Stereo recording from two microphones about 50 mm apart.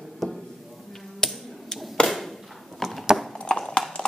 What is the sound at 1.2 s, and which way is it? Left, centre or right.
Finger snapping, centre.